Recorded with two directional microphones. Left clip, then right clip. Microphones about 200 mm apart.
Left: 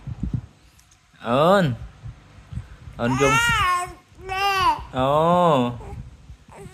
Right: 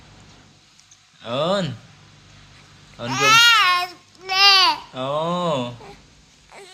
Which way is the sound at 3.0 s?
55° left (ahead or behind).